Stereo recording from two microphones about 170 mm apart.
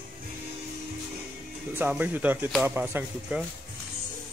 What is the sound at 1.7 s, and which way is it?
Speech, 10° right (ahead or behind).